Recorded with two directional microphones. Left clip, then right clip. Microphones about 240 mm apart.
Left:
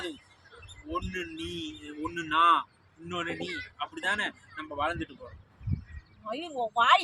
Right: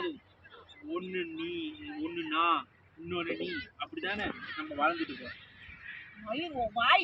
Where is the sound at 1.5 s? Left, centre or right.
Centre.